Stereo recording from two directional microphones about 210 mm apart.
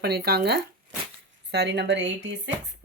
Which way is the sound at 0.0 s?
50° right (ahead or behind).